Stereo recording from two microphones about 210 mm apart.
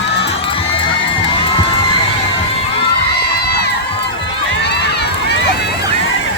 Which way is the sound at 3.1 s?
50° left (ahead or behind).